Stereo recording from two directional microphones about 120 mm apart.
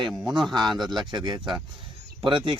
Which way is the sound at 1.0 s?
40° right (ahead or behind).